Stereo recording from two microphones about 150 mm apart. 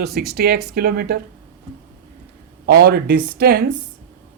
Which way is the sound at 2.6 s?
90° right.